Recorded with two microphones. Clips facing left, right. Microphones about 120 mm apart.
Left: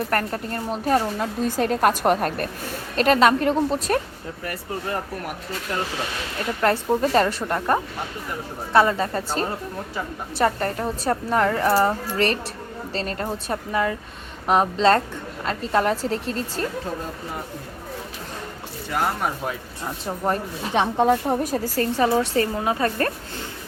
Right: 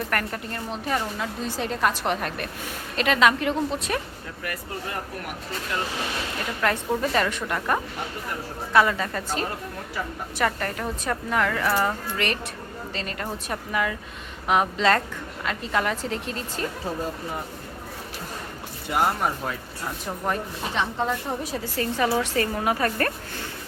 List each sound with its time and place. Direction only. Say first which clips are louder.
0.1 s a woman's voice: left 4 dB; 35° left (ahead or behind)
6.6 s a woman's voice: left 4 dB; 35° left (ahead or behind)
19.5 s speech: left 2 dB; 15° left (ahead or behind)
20.7 s a woman's voice: left 8 dB; 55° left (ahead or behind); by 23.5 s 25° left (ahead or behind)